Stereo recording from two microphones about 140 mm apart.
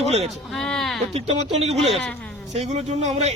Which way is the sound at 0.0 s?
50° right (ahead or behind).